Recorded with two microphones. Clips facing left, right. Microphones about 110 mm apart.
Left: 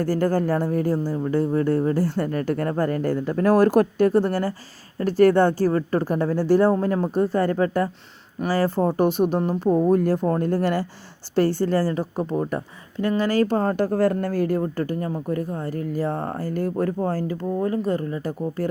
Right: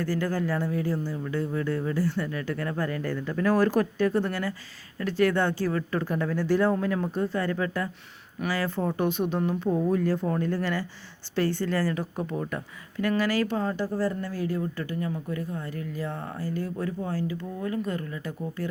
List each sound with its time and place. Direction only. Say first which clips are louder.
0.0 s a woman's voice: left 6 dB; 40° left (ahead or behind)